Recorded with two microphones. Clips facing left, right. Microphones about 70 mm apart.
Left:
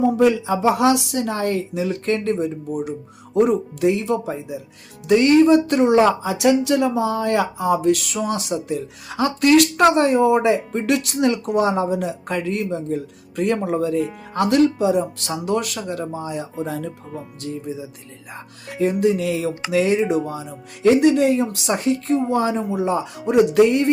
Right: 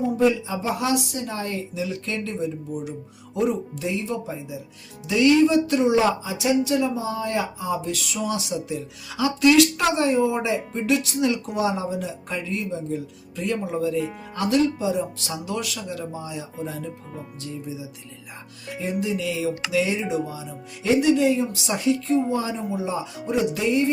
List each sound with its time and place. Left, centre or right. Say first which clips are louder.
0.0 s speech: left 4 dB; left
14.4 s speech: left 5 dB; left
16.6 s speech: left 5 dB; left
17.4 s speech: left 5 dB; left